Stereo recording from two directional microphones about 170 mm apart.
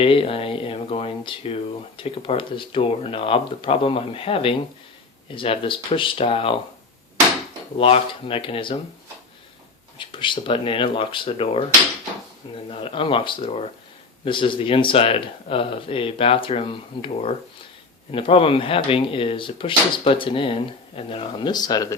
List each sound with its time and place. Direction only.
0.0 s speech: 35° left (ahead or behind)
7.8 s speech: 35° left (ahead or behind)
10.0 s speech: 30° left (ahead or behind)